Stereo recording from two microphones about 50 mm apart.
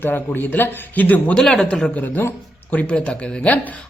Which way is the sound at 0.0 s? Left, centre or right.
Left.